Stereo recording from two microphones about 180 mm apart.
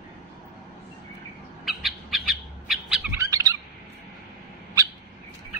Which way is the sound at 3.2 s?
20° right (ahead or behind).